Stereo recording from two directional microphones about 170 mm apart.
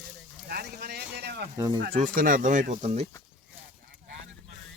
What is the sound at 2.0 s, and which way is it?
Speech, 50° right (ahead or behind).